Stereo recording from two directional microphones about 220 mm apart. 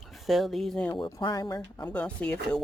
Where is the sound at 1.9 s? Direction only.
5° left (ahead or behind).